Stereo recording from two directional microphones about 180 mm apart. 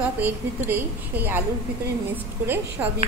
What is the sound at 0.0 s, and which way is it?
A woman's voice, 10° right (ahead or behind).